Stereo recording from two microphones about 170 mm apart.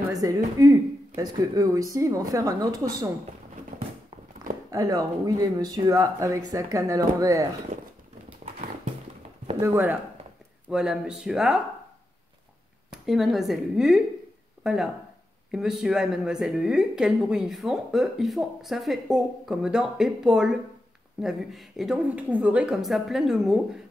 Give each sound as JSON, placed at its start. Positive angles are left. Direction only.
{"t": 0.1, "sound": "speech", "side_deg": -20}
{"t": 4.6, "sound": "speech", "side_deg": -20}
{"t": 7.7, "sound": "speech", "side_deg": -45}
{"t": 9.6, "sound": "a woman's voice", "side_deg": -15}
{"t": 12.9, "sound": "a woman's voice", "side_deg": 0}